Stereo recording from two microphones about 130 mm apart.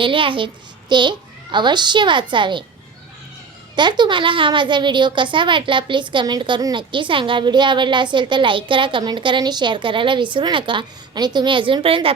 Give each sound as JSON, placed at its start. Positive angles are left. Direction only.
{"t": 0.0, "sound": "a child's voice", "side_deg": -40}
{"t": 3.8, "sound": "a woman's voice", "side_deg": -35}